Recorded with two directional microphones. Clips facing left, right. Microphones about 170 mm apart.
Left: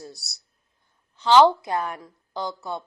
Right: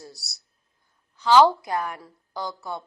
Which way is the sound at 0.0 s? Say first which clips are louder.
Left 3 dB; 20° left (ahead or behind).